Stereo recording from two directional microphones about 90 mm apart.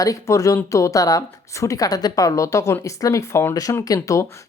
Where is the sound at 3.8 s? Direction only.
40° left (ahead or behind).